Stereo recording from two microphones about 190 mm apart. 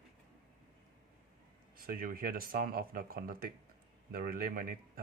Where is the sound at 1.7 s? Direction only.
50° right (ahead or behind).